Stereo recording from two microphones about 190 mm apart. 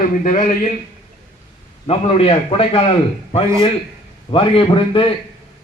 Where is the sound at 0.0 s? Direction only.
40° left (ahead or behind).